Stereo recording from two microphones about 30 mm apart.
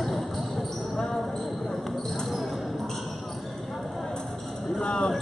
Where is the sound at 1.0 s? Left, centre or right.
Centre.